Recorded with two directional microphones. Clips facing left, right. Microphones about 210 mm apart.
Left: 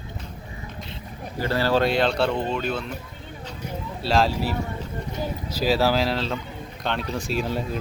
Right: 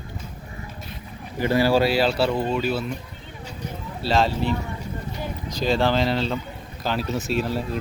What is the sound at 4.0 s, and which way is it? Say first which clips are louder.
Speech: right 1 dB; centre (ahead or behind).